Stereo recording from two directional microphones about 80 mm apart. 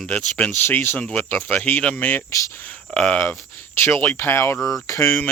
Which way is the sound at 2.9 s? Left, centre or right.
Centre.